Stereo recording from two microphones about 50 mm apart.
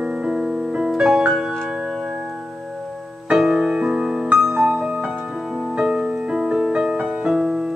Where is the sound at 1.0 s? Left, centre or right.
Centre.